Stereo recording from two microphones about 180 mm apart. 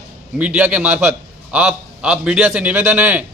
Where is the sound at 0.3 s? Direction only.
5° right (ahead or behind).